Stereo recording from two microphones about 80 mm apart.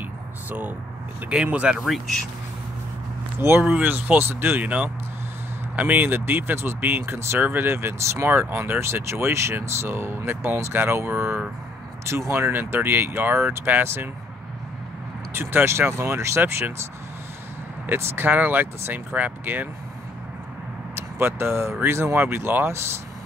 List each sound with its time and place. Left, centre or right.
0.5 s speech: centre
1.8 s speech: centre
3.3 s speech: right
15.3 s speech: right
17.8 s speech: right
20.9 s speech: right